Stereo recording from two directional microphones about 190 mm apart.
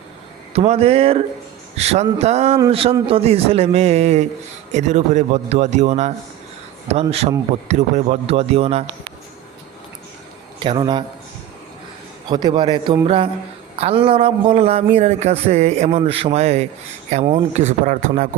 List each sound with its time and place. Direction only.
0.5 s a man's voice: 30° right (ahead or behind)
10.6 s a man's voice: 25° right (ahead or behind)
12.3 s a man's voice: 25° right (ahead or behind); by 18.3 s 45° right (ahead or behind)